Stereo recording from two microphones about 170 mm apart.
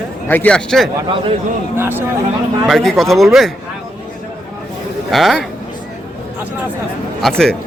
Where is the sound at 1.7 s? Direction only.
15° right (ahead or behind).